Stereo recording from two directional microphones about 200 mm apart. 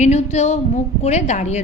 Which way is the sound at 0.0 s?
35° left (ahead or behind).